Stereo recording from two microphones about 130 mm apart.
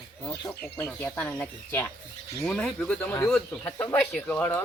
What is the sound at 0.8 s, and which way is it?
Speech, 15° left (ahead or behind).